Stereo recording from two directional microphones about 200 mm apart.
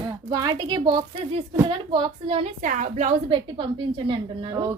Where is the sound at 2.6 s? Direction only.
40° right (ahead or behind); by 4.7 s 25° right (ahead or behind).